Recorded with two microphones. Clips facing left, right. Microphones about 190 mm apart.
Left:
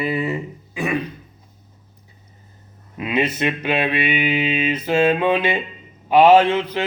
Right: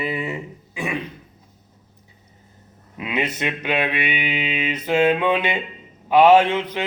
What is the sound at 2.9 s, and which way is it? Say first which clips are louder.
Mantra: left 4 dB; 20° right (ahead or behind).